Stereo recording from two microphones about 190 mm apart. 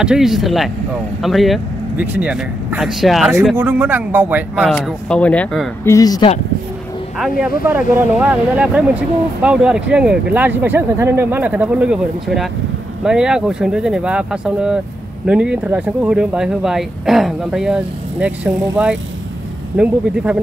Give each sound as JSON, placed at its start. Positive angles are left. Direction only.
{"t": 0.0, "sound": "speech", "side_deg": -5}
{"t": 4.7, "sound": "speech", "side_deg": 5}
{"t": 5.9, "sound": "speech", "side_deg": 20}
{"t": 7.2, "sound": "speech", "side_deg": -5}